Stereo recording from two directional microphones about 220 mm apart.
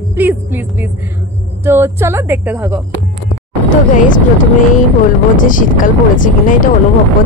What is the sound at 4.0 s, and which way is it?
Speech, 35° left (ahead or behind).